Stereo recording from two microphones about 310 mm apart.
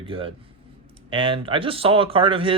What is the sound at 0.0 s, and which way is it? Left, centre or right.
Speech, centre.